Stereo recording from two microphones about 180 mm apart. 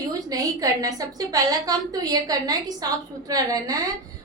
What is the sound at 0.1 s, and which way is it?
A woman's voice, 20° right (ahead or behind).